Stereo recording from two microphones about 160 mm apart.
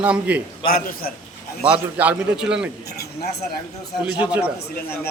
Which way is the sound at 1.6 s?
10° right (ahead or behind).